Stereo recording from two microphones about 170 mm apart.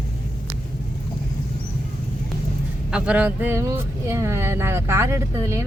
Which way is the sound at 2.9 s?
10° right (ahead or behind).